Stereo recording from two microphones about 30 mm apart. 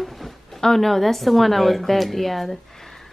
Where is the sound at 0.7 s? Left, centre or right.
Centre.